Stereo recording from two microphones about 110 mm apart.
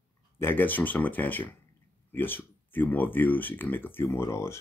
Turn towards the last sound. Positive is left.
turn(degrees=25)  # may be behind; listen again after turning